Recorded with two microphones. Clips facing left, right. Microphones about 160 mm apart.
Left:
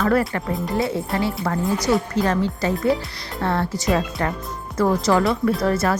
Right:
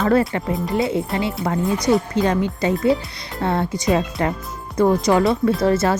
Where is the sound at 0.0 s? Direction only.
25° right (ahead or behind).